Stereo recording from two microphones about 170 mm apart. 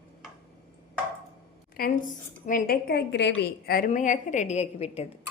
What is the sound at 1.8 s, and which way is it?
A woman's voice, 60° left (ahead or behind).